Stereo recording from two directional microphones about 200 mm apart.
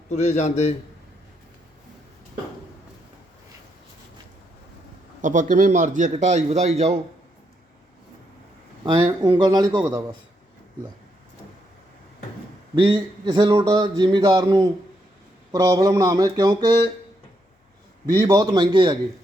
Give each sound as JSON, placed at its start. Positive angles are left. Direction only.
{"t": 0.1, "sound": "a man's voice", "side_deg": 35}
{"t": 5.2, "sound": "a man's voice", "side_deg": -40}
{"t": 8.8, "sound": "a man's voice", "side_deg": -25}
{"t": 12.7, "sound": "a man's voice", "side_deg": -25}
{"t": 18.1, "sound": "a man's voice", "side_deg": -20}